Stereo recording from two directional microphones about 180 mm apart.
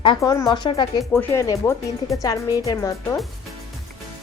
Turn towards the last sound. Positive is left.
turn(degrees=20)  # may be behind; listen again after turning